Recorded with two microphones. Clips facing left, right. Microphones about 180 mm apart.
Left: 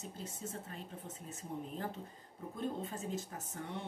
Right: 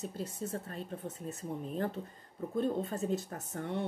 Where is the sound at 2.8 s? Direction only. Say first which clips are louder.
Right 7 dB; 60° right (ahead or behind).